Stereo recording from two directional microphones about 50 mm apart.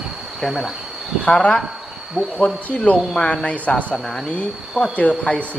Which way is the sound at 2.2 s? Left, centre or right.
Centre.